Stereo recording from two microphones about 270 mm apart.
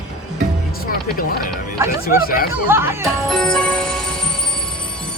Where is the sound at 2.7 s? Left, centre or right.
Centre.